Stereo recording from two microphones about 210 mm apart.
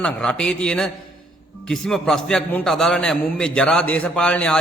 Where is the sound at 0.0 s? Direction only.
5° left (ahead or behind).